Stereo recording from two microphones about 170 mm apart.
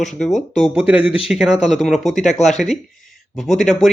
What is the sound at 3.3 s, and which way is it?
Speech, centre (ahead or behind).